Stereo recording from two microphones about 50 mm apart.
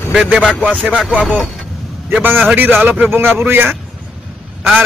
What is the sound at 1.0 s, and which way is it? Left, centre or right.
Speech, right.